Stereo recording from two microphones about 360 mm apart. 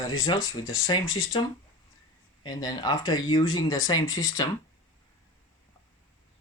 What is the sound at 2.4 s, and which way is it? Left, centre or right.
Speech, centre.